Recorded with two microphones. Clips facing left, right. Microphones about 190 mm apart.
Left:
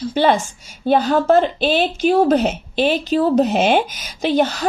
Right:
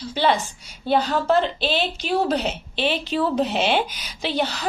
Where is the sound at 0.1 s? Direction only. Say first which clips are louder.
Left 4 dB; 50° left (ahead or behind).